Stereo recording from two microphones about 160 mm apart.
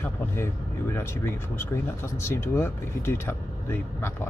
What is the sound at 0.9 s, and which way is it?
Speech, 15° left (ahead or behind).